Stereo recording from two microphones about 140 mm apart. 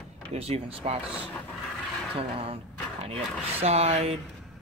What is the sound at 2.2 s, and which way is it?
Speech, 45° right (ahead or behind).